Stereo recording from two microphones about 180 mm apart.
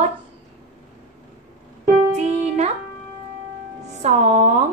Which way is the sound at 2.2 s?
40° right (ahead or behind).